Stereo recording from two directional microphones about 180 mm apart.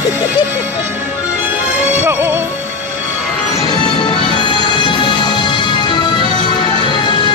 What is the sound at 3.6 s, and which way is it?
Music, 25° left (ahead or behind).